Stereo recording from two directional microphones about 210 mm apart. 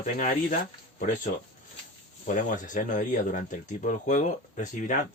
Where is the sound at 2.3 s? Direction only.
40° left (ahead or behind).